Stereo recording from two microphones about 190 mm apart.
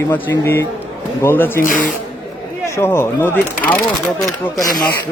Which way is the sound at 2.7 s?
15° left (ahead or behind).